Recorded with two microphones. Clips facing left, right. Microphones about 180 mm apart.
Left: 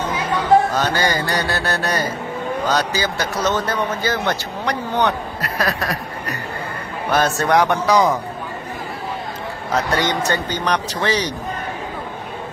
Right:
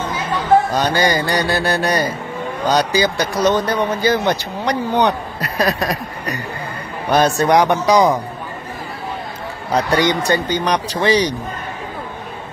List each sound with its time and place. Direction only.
0.7 s speech: 15° right (ahead or behind)
9.9 s speech: 15° right (ahead or behind)